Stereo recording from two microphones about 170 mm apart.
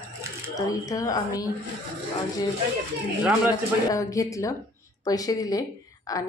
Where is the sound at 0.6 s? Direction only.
20° left (ahead or behind).